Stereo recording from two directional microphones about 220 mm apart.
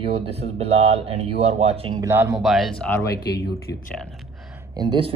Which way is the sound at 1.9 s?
10° right (ahead or behind).